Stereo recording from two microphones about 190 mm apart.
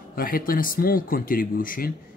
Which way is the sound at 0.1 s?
50° left (ahead or behind).